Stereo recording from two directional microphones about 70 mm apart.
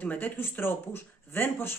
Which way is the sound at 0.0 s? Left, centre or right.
Left.